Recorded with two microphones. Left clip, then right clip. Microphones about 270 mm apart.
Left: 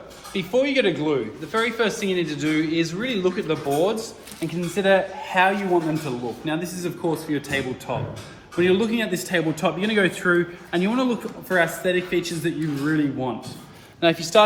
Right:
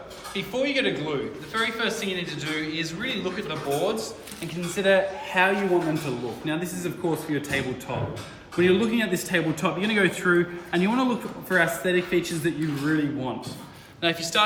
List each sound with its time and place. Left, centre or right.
0.3 s a man's voice: left